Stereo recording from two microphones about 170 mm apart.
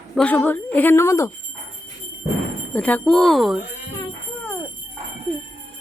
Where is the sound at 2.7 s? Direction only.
10° left (ahead or behind).